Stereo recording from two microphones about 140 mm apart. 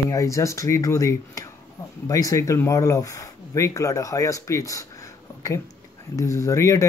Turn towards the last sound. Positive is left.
turn(degrees=20)  # may be behind; listen again after turning